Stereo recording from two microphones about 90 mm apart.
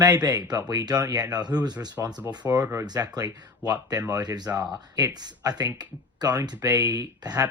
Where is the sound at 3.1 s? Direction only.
45° right (ahead or behind).